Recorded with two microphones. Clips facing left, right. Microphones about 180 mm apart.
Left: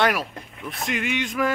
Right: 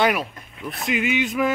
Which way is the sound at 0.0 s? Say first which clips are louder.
Right 1 dB; centre (ahead or behind).